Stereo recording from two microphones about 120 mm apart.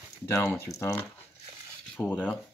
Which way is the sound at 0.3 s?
20° left (ahead or behind).